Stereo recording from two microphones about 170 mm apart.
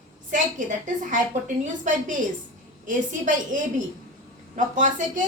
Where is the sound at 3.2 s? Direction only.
50° right (ahead or behind).